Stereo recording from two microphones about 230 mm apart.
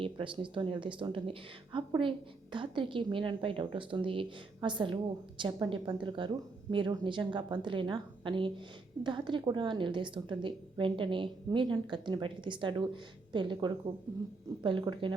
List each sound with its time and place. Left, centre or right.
0.0 s speech: right